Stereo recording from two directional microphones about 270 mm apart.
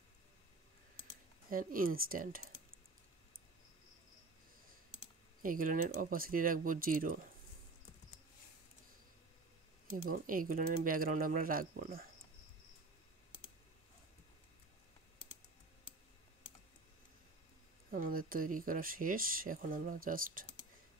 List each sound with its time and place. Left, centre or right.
1.5 s speech: right
5.4 s speech: right
10.0 s speech: right
17.9 s speech: right